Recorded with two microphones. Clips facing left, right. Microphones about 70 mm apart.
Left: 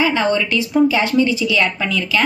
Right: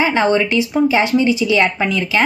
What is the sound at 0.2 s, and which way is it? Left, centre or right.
A woman's voice, right.